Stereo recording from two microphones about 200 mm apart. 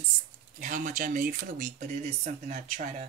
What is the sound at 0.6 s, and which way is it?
Speech, 40° right (ahead or behind).